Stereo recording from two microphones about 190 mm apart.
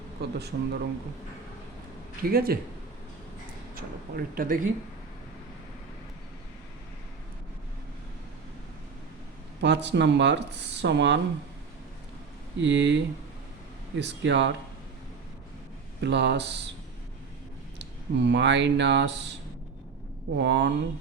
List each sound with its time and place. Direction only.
0.2 s speech: 60° right (ahead or behind)
2.2 s speech: 50° right (ahead or behind)
3.8 s speech: 50° right (ahead or behind)
9.6 s speech: 65° right (ahead or behind)
12.5 s speech: 70° right (ahead or behind)
16.0 s speech: 65° right (ahead or behind)
17.7 s speech: 65° right (ahead or behind)
20.4 s speech: 65° right (ahead or behind)